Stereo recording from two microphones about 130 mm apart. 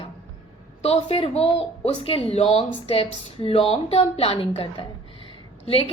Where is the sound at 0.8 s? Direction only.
50° left (ahead or behind).